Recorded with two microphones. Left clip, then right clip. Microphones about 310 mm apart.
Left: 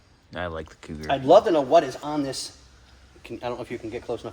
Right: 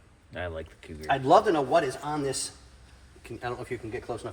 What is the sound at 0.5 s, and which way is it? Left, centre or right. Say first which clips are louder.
Speech: left 4 dB; left.